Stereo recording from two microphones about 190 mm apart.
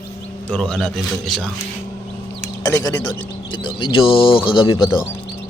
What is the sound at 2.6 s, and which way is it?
Speech, 20° left (ahead or behind).